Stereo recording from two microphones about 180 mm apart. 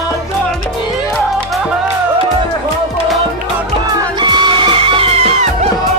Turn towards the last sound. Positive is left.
turn(degrees=-35)  # may be behind; listen again after turning